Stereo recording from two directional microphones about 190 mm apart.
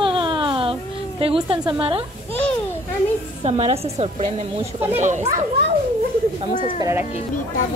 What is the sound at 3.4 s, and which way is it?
A woman's voice, 30° right (ahead or behind).